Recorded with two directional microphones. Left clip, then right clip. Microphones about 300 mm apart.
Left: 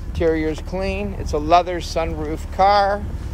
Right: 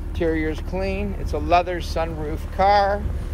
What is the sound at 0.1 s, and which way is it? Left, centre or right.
Speech, left.